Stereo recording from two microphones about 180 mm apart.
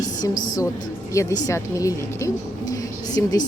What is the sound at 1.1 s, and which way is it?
Speech, 15° left (ahead or behind).